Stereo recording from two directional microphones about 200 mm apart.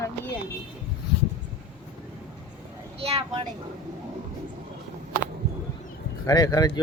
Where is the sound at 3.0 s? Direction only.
30° right (ahead or behind).